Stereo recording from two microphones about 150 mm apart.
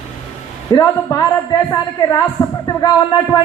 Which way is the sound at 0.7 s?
25° left (ahead or behind).